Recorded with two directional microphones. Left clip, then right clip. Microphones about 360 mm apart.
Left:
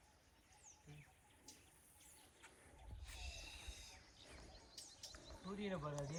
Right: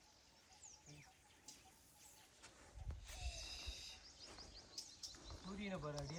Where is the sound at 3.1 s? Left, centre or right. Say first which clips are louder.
Right 2 dB; right.